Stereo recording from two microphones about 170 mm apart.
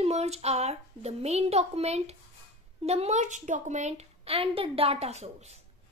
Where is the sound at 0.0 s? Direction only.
40° right (ahead or behind).